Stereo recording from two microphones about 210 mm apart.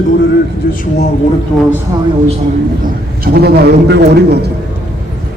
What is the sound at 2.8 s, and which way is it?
A man's voice, 45° right (ahead or behind).